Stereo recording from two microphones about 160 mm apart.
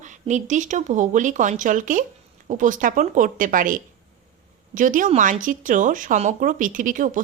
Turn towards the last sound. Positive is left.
turn(degrees=-55)  # may be behind; listen again after turning